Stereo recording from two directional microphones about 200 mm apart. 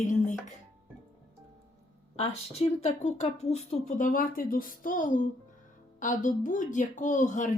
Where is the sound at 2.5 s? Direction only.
30° left (ahead or behind).